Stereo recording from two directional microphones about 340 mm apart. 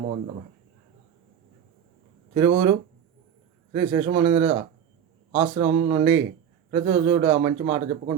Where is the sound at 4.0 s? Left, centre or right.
Centre.